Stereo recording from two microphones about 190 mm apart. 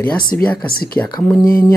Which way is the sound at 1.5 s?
50° left (ahead or behind).